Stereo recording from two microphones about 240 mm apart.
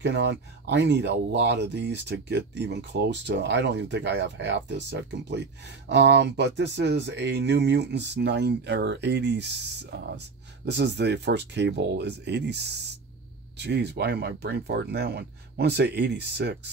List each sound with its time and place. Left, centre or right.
0.0 s speech: right